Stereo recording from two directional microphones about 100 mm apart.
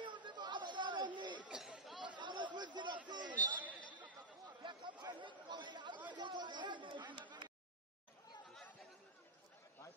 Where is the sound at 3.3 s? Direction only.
15° left (ahead or behind).